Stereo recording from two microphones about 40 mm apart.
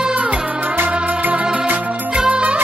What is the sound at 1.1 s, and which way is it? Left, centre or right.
Music, right.